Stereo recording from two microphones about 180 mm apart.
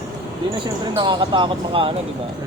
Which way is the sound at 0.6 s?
25° right (ahead or behind).